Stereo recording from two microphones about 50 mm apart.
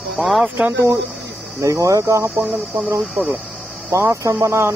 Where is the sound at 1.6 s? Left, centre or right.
Right.